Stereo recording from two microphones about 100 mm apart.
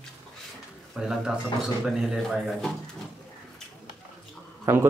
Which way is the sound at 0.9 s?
5° right (ahead or behind).